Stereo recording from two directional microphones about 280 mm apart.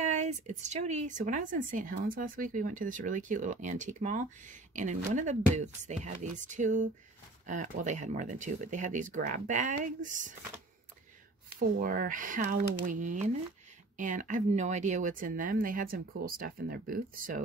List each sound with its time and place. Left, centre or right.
0.0 s speech: right
11.8 s speech: right